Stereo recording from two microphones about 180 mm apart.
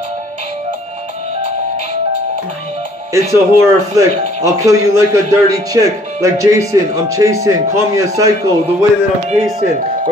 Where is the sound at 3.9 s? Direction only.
20° right (ahead or behind).